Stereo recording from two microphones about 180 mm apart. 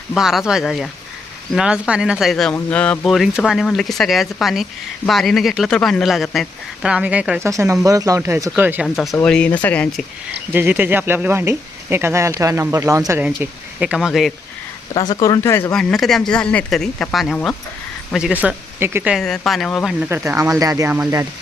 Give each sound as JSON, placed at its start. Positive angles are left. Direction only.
{"t": 0.1, "sound": "speech", "side_deg": 0}
{"t": 9.1, "sound": "speech", "side_deg": 5}
{"t": 10.5, "sound": "speech", "side_deg": -10}
{"t": 14.9, "sound": "speech", "side_deg": 20}
{"t": 15.7, "sound": "speech", "side_deg": 5}
{"t": 19.1, "sound": "speech", "side_deg": 0}
{"t": 20.1, "sound": "speech", "side_deg": -15}